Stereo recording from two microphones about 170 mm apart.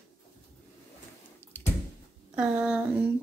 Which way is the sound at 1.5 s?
10° left (ahead or behind).